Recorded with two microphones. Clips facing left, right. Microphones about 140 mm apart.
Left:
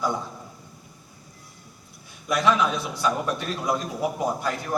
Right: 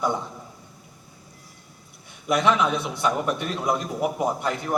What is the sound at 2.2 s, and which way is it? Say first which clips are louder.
A man's voice: right 1 dB; 20° right (ahead or behind).